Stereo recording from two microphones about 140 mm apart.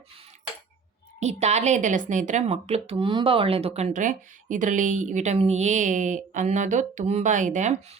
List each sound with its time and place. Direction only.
1.2 s speech: 50° right (ahead or behind)